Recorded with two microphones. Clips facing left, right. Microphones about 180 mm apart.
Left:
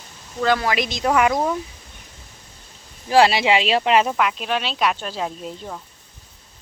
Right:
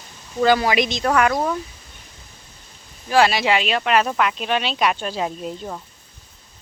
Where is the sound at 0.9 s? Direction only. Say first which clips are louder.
Even; 10° left (ahead or behind).